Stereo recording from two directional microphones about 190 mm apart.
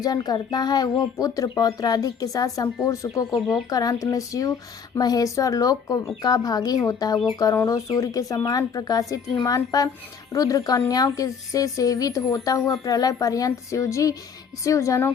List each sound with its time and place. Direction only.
0.0 s speech: 20° left (ahead or behind)